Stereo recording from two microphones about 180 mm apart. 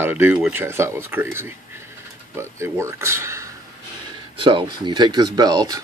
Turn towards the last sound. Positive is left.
turn(degrees=-20)  # may be behind; listen again after turning